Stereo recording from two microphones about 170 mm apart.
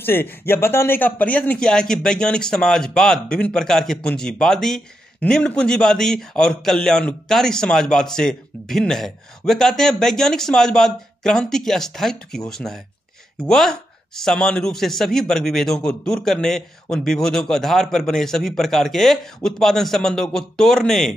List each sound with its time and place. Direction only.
0.0 s speech: 10° left (ahead or behind)